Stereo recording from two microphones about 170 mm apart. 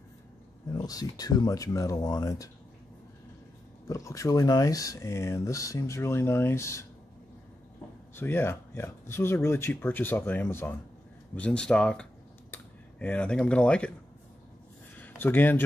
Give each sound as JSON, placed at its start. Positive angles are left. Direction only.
{"t": 0.7, "sound": "speech", "side_deg": 20}
{"t": 3.8, "sound": "speech", "side_deg": 20}
{"t": 8.2, "sound": "speech", "side_deg": 15}
{"t": 15.0, "sound": "speech", "side_deg": 10}